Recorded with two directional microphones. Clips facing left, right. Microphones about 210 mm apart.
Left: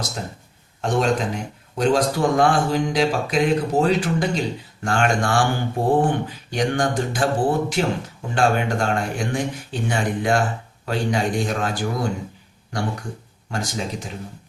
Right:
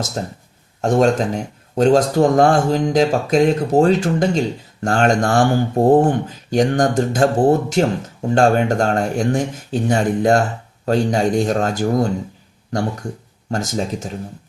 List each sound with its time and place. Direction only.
0.2 s speech: 40° right (ahead or behind)
13.5 s speech: 45° right (ahead or behind)